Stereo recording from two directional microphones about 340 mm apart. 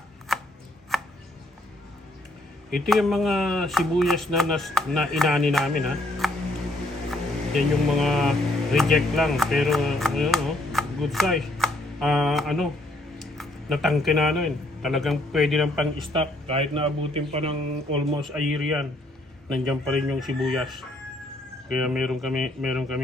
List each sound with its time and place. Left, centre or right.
0.3 s chopping: centre
0.9 s a sound: centre
2.6 s a man's voice: centre
16.1 s speech: centre
18.2 s speech: centre